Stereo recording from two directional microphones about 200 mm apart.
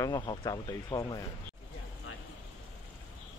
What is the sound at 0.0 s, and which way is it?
Speech, 20° left (ahead or behind).